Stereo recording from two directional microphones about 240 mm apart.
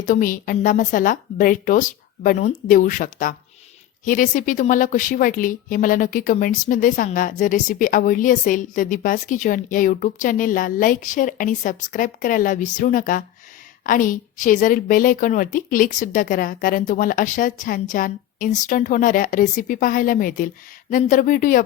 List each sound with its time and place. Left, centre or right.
0.0 s a woman's voice: left